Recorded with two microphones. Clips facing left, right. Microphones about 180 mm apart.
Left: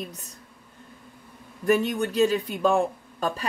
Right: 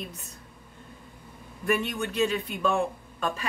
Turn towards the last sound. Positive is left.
turn(degrees=35)  # may be behind; listen again after turning